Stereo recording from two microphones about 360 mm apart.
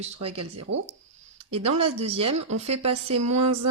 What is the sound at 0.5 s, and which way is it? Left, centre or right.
A woman's voice, right.